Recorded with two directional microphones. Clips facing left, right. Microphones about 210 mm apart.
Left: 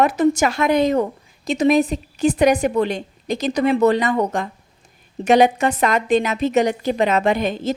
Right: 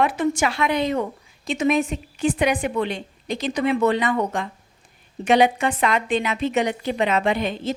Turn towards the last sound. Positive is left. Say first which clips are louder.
# left 3 dB
turn(degrees=45)  # may be behind; listen again after turning